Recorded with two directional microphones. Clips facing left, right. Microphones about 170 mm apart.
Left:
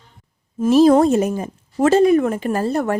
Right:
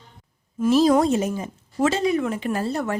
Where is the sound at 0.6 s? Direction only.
50° left (ahead or behind).